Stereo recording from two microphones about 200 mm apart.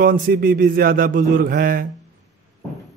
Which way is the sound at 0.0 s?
45° right (ahead or behind).